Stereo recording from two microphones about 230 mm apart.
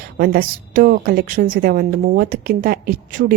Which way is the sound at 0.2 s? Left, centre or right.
Right.